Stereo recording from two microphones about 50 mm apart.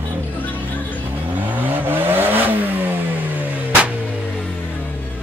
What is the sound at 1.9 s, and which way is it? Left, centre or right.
Vehicle, right.